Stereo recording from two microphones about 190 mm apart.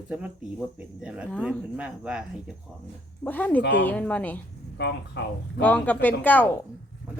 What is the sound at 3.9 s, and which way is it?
Speech, 10° left (ahead or behind).